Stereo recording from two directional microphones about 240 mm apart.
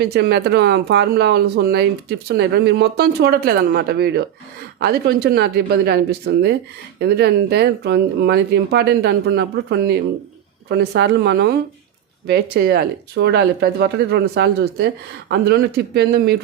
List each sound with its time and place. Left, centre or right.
0.0 s speech: right